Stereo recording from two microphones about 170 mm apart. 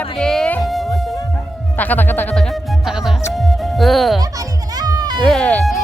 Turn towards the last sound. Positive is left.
turn(degrees=5)  # may be behind; listen again after turning